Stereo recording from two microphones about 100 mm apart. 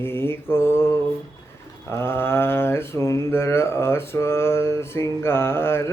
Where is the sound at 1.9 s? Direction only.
25° left (ahead or behind).